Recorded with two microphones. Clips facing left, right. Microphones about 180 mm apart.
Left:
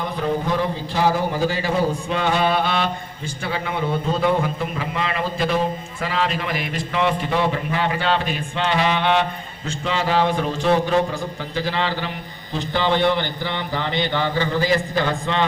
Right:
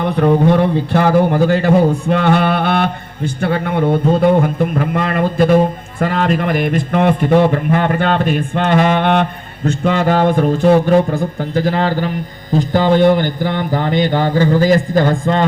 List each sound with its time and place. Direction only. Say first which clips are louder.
0.0 s speech: right 10 dB; 60° right (ahead or behind)